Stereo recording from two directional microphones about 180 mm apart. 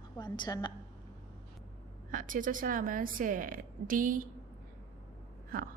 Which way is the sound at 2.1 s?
45° right (ahead or behind).